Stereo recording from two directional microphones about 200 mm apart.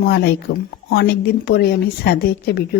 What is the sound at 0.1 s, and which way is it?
Speech, 55° left (ahead or behind).